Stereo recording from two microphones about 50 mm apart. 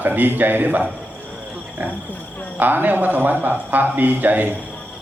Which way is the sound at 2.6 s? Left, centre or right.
Right.